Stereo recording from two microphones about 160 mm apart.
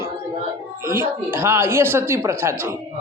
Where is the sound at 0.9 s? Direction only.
15° right (ahead or behind).